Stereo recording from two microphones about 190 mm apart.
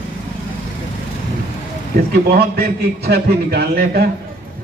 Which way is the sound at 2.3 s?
55° right (ahead or behind).